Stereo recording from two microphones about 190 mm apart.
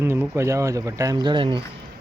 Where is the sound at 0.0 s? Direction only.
15° right (ahead or behind).